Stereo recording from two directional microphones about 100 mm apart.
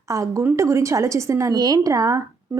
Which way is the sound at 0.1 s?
30° right (ahead or behind).